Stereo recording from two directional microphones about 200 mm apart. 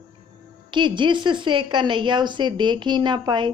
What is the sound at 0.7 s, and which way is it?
A woman's voice, 25° right (ahead or behind).